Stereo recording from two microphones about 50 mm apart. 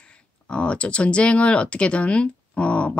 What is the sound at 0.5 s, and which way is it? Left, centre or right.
Speech, left.